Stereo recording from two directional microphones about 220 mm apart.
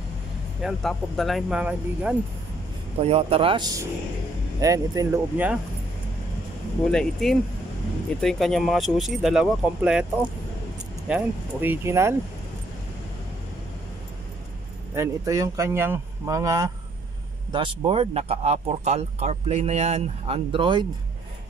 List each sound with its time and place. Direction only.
0.6 s speech: centre (ahead or behind)
3.0 s speech: 25° right (ahead or behind); by 5.6 s 10° right (ahead or behind)
6.9 s speech: centre (ahead or behind)
11.1 s speech: 5° right (ahead or behind)
15.0 s speech: 15° right (ahead or behind)